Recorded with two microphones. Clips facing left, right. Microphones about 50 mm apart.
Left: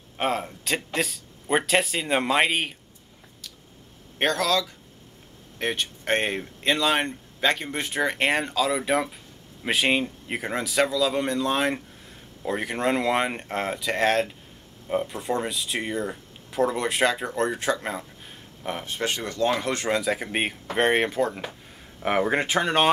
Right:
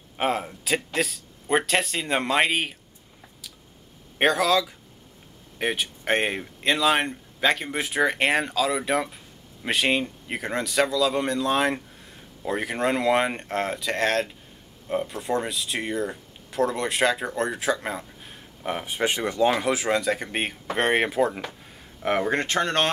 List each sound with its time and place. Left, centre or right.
0.2 s speech: centre
4.2 s speech: centre
22.0 s speech: centre